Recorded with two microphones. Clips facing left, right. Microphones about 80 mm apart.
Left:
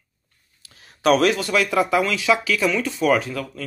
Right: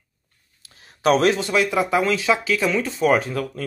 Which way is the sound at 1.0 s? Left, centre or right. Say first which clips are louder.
Even; right.